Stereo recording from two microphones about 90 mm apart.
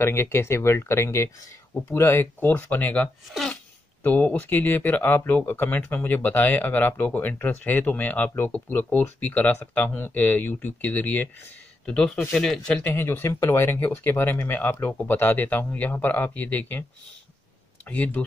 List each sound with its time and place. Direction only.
0.0 s speech: 30° left (ahead or behind); by 12.7 s 5° left (ahead or behind)
12.7 s speech: 20° left (ahead or behind)
17.8 s speech: 15° left (ahead or behind)